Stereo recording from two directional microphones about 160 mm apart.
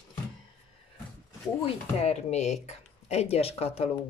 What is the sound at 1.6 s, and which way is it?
Speech, 40° left (ahead or behind).